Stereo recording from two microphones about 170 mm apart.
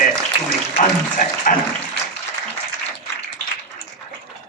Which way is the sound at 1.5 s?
55° left (ahead or behind).